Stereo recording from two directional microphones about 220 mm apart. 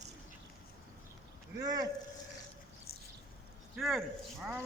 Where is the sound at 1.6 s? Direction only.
15° right (ahead or behind).